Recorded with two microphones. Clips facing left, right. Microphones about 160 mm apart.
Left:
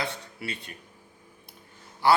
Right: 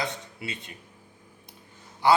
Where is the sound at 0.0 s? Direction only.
20° right (ahead or behind).